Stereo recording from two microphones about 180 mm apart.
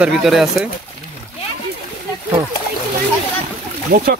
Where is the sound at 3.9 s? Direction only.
55° right (ahead or behind).